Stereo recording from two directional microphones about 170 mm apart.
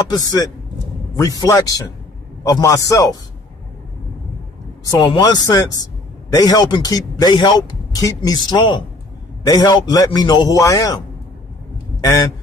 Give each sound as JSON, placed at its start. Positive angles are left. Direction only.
{"t": 0.1, "sound": "a man's voice", "side_deg": 25}
{"t": 4.9, "sound": "a man's voice", "side_deg": 25}
{"t": 12.0, "sound": "a man's voice", "side_deg": 20}